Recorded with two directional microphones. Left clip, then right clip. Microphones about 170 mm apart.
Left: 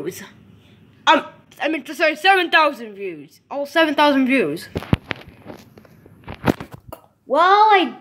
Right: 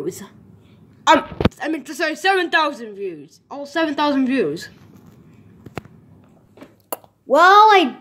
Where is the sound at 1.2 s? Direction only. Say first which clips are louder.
Right 3 dB; centre (ahead or behind).